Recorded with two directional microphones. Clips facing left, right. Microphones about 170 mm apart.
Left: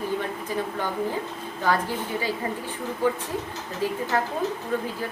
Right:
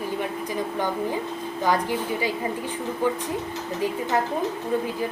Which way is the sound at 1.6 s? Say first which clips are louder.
Right 1 dB; 15° right (ahead or behind).